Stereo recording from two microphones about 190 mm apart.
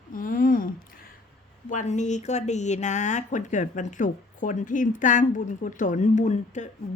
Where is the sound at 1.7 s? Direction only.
40° left (ahead or behind).